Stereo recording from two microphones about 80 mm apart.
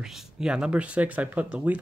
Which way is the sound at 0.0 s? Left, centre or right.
Centre.